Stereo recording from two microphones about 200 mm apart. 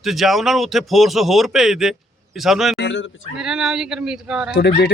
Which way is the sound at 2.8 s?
70° left (ahead or behind).